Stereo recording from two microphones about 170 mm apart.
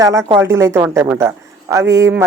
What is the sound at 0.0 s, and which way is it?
A man's voice, 20° right (ahead or behind).